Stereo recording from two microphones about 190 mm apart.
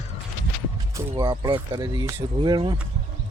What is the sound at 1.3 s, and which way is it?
Speech, 25° right (ahead or behind).